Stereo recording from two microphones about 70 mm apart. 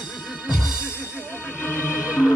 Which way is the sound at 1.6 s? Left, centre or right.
Left.